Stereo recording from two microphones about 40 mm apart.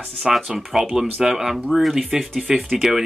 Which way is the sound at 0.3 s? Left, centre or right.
Centre.